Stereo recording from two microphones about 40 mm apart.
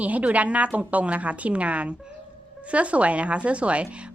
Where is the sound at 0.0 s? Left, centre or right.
Right.